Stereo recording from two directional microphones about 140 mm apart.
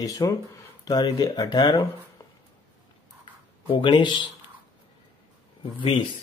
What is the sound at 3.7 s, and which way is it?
Speech, 35° left (ahead or behind).